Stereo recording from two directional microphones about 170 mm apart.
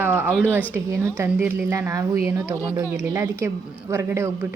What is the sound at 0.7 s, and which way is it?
A woman's voice, 15° right (ahead or behind).